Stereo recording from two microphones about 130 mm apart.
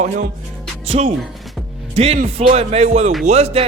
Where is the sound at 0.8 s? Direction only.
50° right (ahead or behind).